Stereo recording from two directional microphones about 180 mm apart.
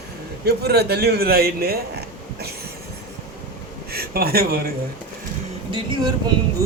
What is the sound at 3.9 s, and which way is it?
Speech, 55° right (ahead or behind).